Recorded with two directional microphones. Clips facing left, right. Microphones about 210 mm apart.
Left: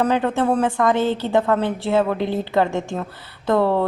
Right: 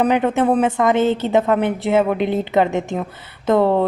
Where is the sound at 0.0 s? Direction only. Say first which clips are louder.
Right 3 dB; 20° right (ahead or behind).